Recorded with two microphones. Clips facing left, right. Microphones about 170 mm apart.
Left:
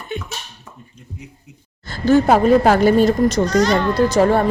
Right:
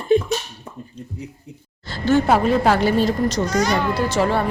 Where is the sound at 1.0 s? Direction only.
35° right (ahead or behind).